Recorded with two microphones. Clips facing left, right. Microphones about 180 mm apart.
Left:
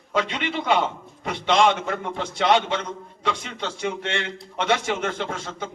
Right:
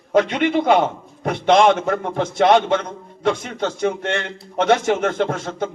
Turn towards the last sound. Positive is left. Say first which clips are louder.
# right 8 dB
turn(degrees=-50)  # may be behind; listen again after turning